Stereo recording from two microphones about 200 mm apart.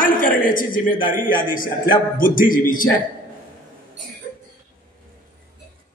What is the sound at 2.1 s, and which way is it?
Speech, 45° left (ahead or behind).